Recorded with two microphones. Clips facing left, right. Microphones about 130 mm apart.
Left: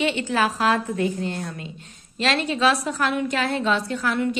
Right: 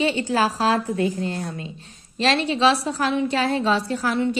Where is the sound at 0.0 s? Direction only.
35° right (ahead or behind).